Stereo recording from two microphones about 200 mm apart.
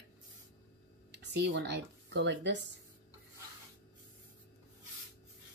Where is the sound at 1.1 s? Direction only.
60° right (ahead or behind).